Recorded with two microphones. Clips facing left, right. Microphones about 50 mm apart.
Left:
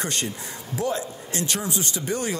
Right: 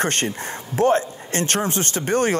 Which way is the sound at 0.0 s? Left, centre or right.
Right.